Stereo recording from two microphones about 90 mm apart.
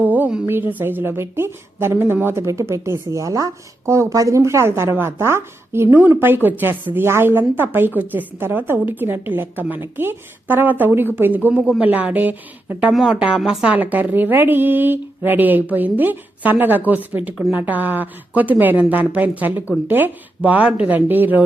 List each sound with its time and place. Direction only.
0.0 s a sound: 20° right (ahead or behind)
0.4 s a woman's voice: 25° right (ahead or behind)
12.9 s a woman's voice: centre (ahead or behind); by 21.4 s 20° right (ahead or behind)